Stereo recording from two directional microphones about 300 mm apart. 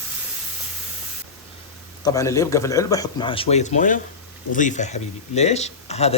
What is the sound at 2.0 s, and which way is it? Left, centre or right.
A man's voice, centre.